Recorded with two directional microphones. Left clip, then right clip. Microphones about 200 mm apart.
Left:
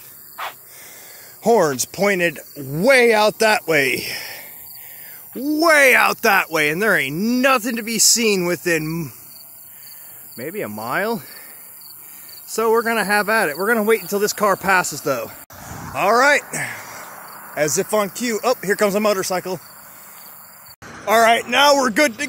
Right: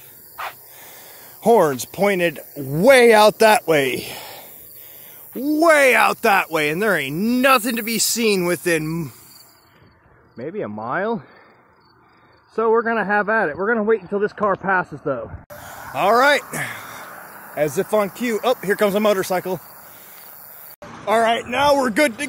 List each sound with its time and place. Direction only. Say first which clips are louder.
1.4 s speech: right 1 dB; 5° right (ahead or behind)
10.3 s speech: even; 5° left (ahead or behind)
12.5 s speech: even; 10° left (ahead or behind)
15.5 s a sound: right 1 dB; 10° right (ahead or behind)
17.1 s a sound: left 1 dB; 45° right (ahead or behind)
17.6 s speech: even; centre (ahead or behind)
21.0 s vehicle: left 3 dB; centre (ahead or behind)
21.3 s speech: left 3 dB; 10° left (ahead or behind); by 22.3 s 5° right (ahead or behind)